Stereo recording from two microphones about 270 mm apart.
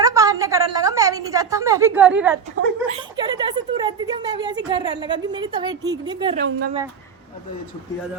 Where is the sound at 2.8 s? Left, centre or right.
Right.